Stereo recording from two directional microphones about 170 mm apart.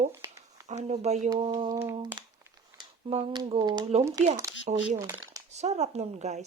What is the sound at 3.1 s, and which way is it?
Speech, 30° right (ahead or behind).